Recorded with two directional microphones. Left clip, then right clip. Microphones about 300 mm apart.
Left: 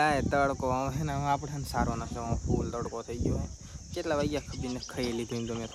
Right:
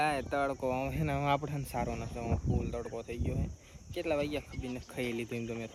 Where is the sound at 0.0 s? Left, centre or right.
Centre.